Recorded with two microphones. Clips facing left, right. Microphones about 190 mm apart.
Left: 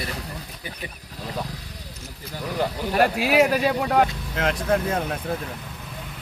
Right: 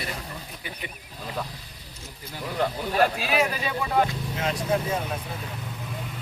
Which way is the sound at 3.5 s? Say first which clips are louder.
Left 5 dB; 75° left (ahead or behind).